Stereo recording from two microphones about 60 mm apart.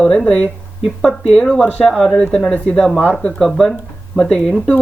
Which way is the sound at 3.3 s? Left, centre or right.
Centre.